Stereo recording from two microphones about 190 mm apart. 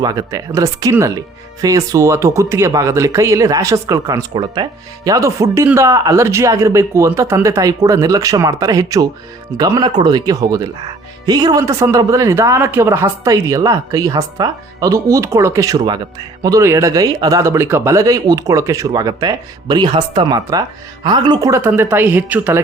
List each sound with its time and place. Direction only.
0.0 s speech: 20° right (ahead or behind)